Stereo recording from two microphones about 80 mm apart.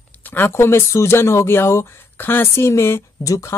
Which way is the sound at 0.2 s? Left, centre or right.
Left.